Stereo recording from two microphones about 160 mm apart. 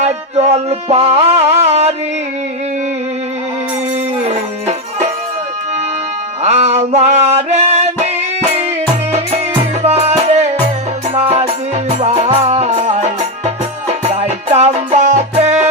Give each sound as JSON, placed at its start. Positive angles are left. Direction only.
{"t": 0.0, "sound": "music", "side_deg": -40}
{"t": 6.4, "sound": "male singing", "side_deg": -45}
{"t": 9.8, "sound": "music", "side_deg": -40}